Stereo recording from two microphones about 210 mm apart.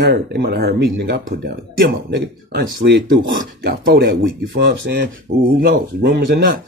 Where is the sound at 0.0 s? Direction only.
50° right (ahead or behind).